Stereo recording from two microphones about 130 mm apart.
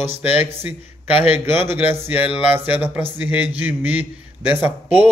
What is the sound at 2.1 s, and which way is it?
Speech, 45° left (ahead or behind).